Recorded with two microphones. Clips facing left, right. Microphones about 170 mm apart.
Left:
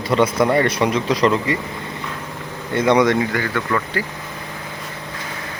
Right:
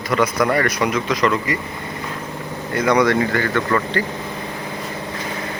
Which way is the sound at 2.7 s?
25° left (ahead or behind).